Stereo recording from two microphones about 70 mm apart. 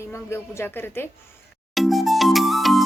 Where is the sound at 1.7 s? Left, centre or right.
Centre.